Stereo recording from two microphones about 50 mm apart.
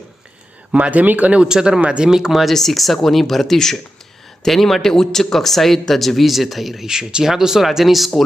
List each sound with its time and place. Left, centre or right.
0.7 s speech: right; by 2.5 s centre
2.5 s speech: centre